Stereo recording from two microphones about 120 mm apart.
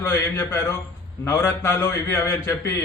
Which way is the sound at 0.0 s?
20° left (ahead or behind).